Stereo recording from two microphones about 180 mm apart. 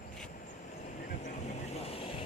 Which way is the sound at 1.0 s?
40° left (ahead or behind).